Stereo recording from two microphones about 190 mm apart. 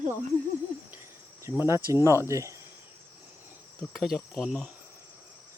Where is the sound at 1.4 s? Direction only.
15° right (ahead or behind).